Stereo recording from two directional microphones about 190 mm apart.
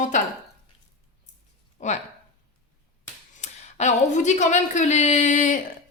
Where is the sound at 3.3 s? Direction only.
35° left (ahead or behind).